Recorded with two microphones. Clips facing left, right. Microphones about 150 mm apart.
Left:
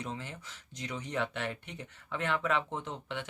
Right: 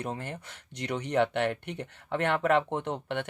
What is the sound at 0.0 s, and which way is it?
Speech, 55° right (ahead or behind).